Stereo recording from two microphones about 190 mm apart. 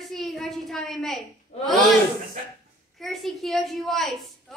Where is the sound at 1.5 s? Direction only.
30° left (ahead or behind).